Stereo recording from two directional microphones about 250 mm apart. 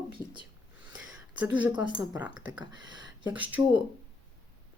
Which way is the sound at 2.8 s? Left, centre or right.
Left.